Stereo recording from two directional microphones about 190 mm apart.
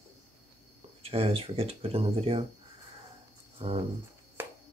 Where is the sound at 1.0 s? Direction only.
30° right (ahead or behind).